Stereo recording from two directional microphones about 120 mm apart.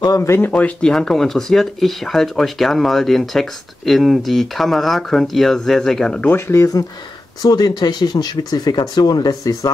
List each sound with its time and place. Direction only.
0.0 s speech: 25° left (ahead or behind); by 6.3 s 5° left (ahead or behind)
6.3 s speech: 25° left (ahead or behind)